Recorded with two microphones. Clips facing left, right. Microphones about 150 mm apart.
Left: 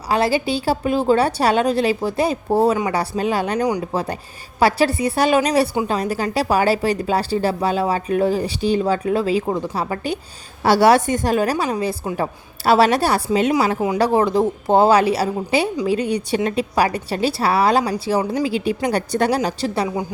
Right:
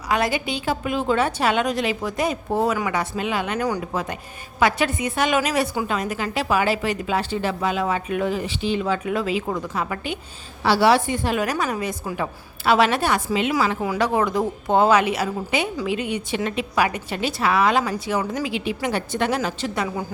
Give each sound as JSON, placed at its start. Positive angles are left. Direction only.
{"t": 0.1, "sound": "speech", "side_deg": 30}
{"t": 10.6, "sound": "a woman's voice", "side_deg": 45}